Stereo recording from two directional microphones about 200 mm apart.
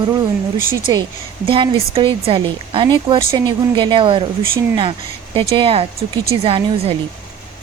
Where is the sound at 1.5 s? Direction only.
25° right (ahead or behind).